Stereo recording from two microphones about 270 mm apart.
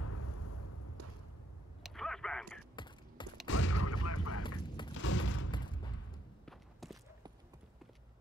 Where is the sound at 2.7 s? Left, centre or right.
Centre.